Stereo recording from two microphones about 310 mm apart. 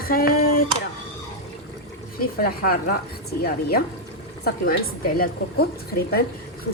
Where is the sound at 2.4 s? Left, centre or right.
Left.